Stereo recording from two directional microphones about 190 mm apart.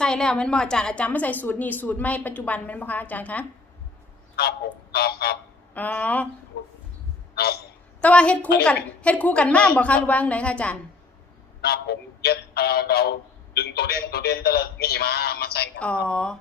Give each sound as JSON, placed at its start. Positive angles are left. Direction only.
{"t": 0.0, "sound": "a woman's voice", "side_deg": 5}
{"t": 4.4, "sound": "a sound", "side_deg": 55}
{"t": 5.7, "sound": "a woman's voice", "side_deg": 10}
{"t": 7.3, "sound": "speech", "side_deg": 55}
{"t": 8.0, "sound": "a woman's voice", "side_deg": 5}
{"t": 11.6, "sound": "speech", "side_deg": 55}
{"t": 16.0, "sound": "speech", "side_deg": 5}